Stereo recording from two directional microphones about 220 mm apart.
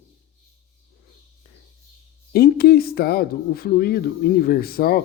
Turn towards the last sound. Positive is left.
turn(degrees=45)  # may be behind; listen again after turning